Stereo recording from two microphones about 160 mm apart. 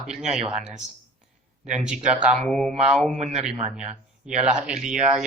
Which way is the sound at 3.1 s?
45° right (ahead or behind).